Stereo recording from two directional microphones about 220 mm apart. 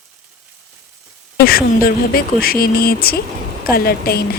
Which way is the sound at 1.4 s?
45° left (ahead or behind).